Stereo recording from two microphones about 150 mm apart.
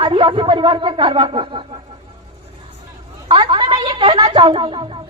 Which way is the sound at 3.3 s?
30° right (ahead or behind).